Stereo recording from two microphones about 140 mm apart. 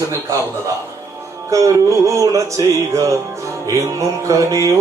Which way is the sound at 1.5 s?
20° right (ahead or behind).